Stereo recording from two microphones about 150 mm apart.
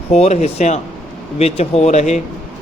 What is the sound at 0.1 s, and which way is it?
Speech, 45° left (ahead or behind).